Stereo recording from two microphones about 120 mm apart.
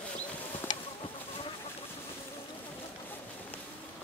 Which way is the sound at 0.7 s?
35° left (ahead or behind).